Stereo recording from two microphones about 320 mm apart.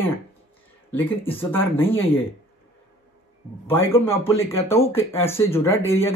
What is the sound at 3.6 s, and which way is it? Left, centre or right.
Speech, centre.